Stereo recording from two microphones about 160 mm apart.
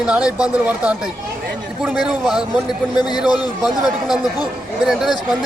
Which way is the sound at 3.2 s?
Centre (ahead or behind).